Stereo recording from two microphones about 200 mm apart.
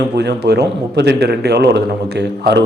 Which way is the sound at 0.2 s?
55° right (ahead or behind).